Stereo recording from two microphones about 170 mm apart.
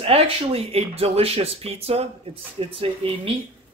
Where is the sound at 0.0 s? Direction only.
35° right (ahead or behind).